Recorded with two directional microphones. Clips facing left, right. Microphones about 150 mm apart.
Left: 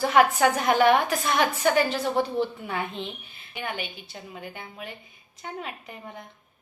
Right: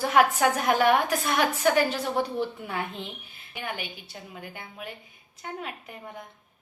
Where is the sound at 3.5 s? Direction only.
5° right (ahead or behind).